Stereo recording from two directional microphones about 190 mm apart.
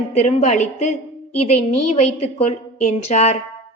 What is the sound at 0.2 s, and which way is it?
A woman's voice, 35° left (ahead or behind).